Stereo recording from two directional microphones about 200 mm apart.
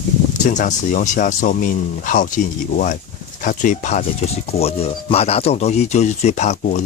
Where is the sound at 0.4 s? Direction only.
40° left (ahead or behind).